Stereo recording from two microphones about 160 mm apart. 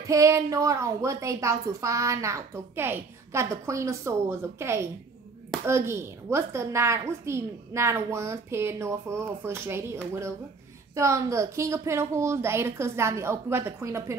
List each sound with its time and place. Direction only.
0.0 s a woman's voice: 20° right (ahead or behind)
11.0 s a woman's voice: 20° right (ahead or behind)